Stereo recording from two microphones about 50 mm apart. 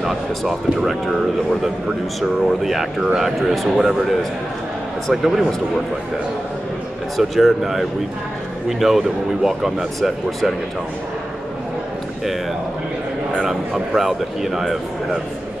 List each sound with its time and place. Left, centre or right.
0.4 s speech: centre
2.6 s speech: centre
7.2 s speech: centre
13.5 s speech: centre